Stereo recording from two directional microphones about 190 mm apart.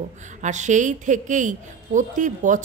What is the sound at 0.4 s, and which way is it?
A woman's voice, 40° right (ahead or behind).